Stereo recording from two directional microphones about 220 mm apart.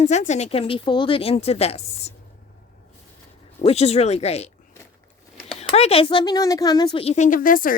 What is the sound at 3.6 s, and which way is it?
Speech, 30° left (ahead or behind).